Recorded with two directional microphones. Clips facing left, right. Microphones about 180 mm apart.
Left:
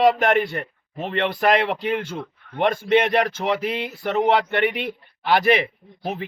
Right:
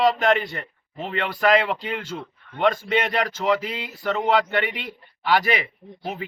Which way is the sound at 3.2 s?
55° left (ahead or behind).